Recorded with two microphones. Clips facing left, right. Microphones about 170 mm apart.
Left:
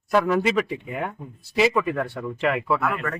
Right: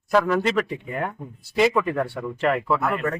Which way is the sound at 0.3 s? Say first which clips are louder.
Even; 5° left (ahead or behind).